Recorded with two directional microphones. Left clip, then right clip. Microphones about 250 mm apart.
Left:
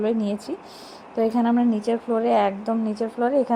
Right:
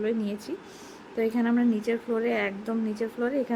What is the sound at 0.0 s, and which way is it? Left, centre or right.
A woman's voice, centre.